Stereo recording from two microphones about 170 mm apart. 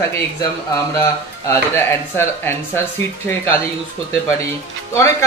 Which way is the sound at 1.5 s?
15° left (ahead or behind).